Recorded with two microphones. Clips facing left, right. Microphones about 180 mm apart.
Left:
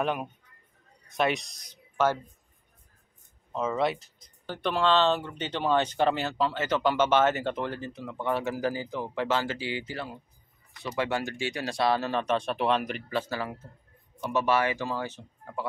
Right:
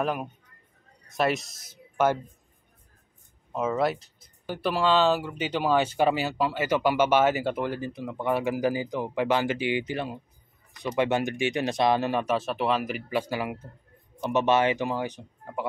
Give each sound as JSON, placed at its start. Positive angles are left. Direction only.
{"t": 0.0, "sound": "speech", "side_deg": 0}
{"t": 3.5, "sound": "speech", "side_deg": -5}